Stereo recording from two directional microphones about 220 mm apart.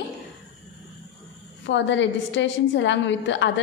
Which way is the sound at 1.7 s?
55° left (ahead or behind).